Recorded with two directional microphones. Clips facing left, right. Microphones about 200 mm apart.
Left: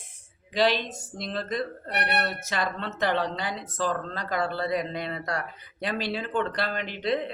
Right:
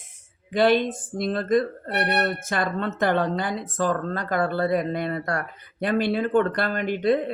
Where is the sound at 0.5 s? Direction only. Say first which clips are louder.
Right 5 dB; 55° right (ahead or behind).